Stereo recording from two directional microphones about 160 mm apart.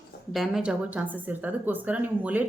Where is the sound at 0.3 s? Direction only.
5° right (ahead or behind).